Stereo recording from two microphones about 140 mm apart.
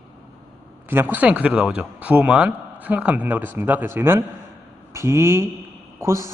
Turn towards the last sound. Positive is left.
turn(degrees=-20)  # may be behind; listen again after turning